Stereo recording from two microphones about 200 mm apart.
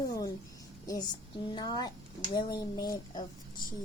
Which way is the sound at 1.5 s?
20° left (ahead or behind).